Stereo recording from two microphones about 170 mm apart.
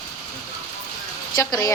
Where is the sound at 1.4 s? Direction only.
20° left (ahead or behind).